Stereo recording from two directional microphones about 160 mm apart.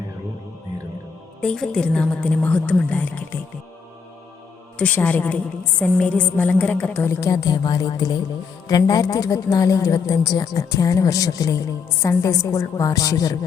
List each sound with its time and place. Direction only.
1.4 s a woman's voice: 5° left (ahead or behind)
4.8 s a woman's voice: 10° left (ahead or behind)